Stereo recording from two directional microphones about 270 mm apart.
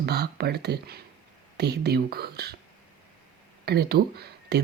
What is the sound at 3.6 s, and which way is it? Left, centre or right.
Speech, right.